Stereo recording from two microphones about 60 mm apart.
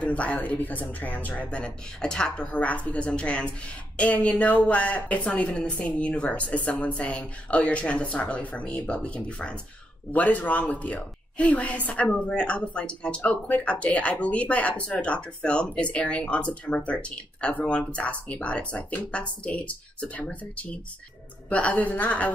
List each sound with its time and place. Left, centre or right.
0.0 s speech: left